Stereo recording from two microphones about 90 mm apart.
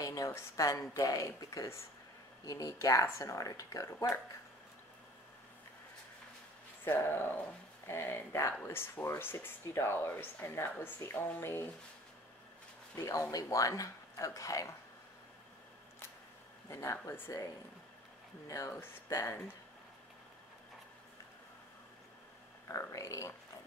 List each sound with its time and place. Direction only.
0.0 s a sound: 40° left (ahead or behind)
0.9 s speech: 40° left (ahead or behind)
6.8 s speech: 25° left (ahead or behind)
12.9 s speech: 35° left (ahead or behind)
16.6 s speech: 35° left (ahead or behind)
18.5 s speech: 30° left (ahead or behind)
22.7 s speech: 35° left (ahead or behind)